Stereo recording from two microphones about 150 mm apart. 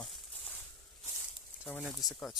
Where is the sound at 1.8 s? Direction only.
Centre (ahead or behind).